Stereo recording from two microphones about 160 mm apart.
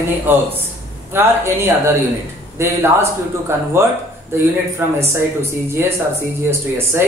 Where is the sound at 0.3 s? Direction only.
15° right (ahead or behind).